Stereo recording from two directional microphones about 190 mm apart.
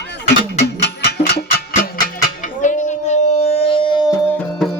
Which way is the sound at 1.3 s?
55° left (ahead or behind).